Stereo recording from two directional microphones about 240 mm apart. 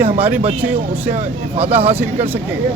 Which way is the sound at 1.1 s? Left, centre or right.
Right.